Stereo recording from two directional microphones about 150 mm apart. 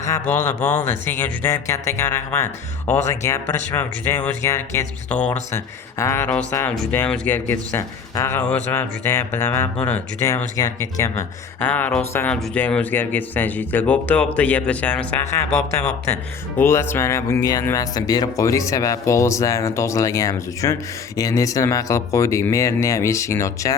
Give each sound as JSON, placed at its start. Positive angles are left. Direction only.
{"t": 0.3, "sound": "speech", "side_deg": 10}
{"t": 11.2, "sound": "speech", "side_deg": 10}
{"t": 15.4, "sound": "speech", "side_deg": 50}
{"t": 16.6, "sound": "speech", "side_deg": 15}